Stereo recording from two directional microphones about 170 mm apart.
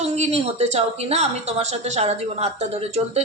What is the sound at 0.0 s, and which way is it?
A woman's voice, 40° right (ahead or behind).